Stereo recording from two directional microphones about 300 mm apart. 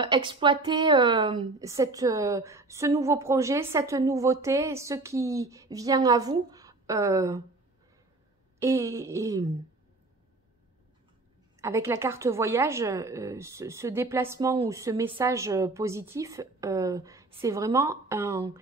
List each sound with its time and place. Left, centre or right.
0.0 s a woman's voice: centre
8.5 s a woman's voice: centre
11.6 s a woman's voice: centre